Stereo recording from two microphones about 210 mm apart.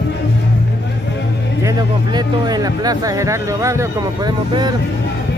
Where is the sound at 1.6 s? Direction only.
20° right (ahead or behind).